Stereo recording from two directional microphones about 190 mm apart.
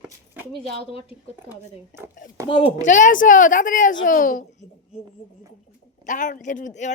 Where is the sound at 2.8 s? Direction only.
40° left (ahead or behind).